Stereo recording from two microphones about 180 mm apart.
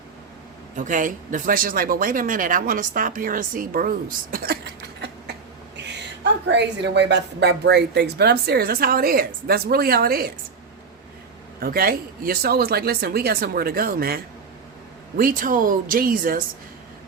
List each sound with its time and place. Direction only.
0.8 s speech: 45° right (ahead or behind); by 5.1 s 60° right (ahead or behind)
6.5 s speech: 70° right (ahead or behind); by 10.3 s 55° right (ahead or behind)
11.6 s speech: 55° right (ahead or behind)
15.2 s speech: 50° right (ahead or behind)